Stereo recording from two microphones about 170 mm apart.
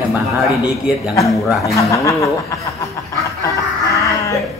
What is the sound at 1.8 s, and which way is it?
Snicker, 20° left (ahead or behind).